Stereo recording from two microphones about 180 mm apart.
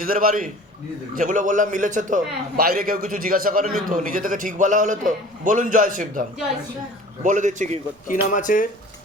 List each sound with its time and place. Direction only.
0.0 s a man's voice: 50° right (ahead or behind)
7.3 s a man's voice: 45° right (ahead or behind)
8.0 s speech: 45° left (ahead or behind)